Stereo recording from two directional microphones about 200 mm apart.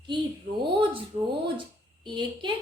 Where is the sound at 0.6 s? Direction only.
25° right (ahead or behind).